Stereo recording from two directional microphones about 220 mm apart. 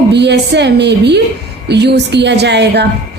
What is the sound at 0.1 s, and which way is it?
A woman's voice, 50° right (ahead or behind).